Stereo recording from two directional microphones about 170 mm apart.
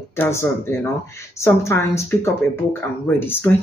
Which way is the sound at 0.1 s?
15° left (ahead or behind).